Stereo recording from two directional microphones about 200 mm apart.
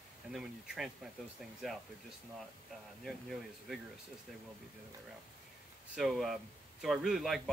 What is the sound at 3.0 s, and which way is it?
Speech, centre (ahead or behind).